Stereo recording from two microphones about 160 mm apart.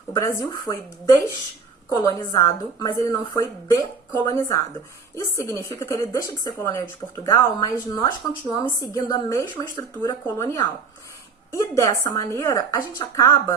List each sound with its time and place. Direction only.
0.1 s a woman's voice: 25° left (ahead or behind)